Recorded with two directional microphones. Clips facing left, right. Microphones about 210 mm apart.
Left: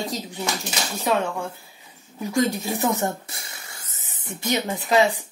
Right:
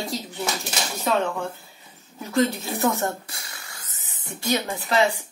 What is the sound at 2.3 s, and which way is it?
Speech, 15° left (ahead or behind).